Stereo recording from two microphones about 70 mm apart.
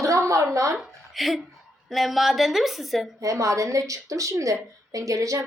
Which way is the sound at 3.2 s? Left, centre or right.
Right.